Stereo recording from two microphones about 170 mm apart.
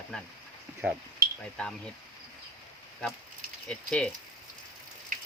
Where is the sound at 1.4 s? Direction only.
5° left (ahead or behind).